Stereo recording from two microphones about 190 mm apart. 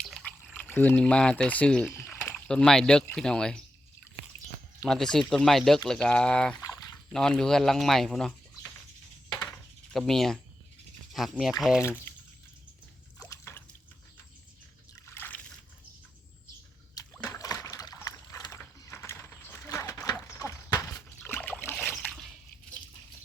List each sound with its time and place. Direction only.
0.0 s pour: centre (ahead or behind)
1.9 s speech: 15° left (ahead or behind)
4.8 s speech: centre (ahead or behind)
6.6 s a sound: 20° left (ahead or behind)
7.1 s speech: 5° left (ahead or behind)
9.3 s a sound: 20° left (ahead or behind)
9.9 s speech: centre (ahead or behind)
11.8 s speech: 10° left (ahead or behind)
13.1 s drip: 15° left (ahead or behind)
14.9 s liquid: 15° left (ahead or behind)
16.9 s a sound: 15° left (ahead or behind)
20.1 s horse: 15° left (ahead or behind)
21.2 s boat: 5° left (ahead or behind)
21.8 s splash: 10° left (ahead or behind)